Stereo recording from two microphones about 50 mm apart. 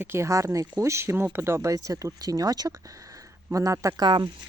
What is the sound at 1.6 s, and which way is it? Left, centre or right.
Speech, right.